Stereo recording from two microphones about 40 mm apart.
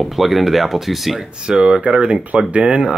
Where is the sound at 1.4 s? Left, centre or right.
Centre.